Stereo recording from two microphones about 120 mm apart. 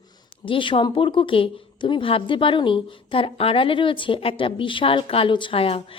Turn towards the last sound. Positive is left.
turn(degrees=50)  # may be behind; listen again after turning